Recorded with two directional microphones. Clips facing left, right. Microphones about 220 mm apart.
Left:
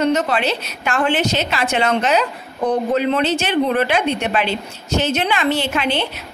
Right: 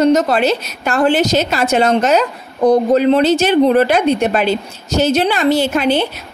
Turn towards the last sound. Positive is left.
turn(degrees=-40)  # may be behind; listen again after turning